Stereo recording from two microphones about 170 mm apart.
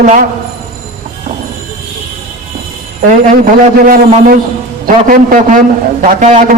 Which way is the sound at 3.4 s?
55° right (ahead or behind).